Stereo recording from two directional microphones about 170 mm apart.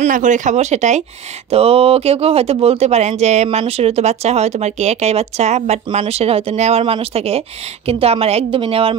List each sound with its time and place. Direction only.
0.0 s speech: 45° right (ahead or behind)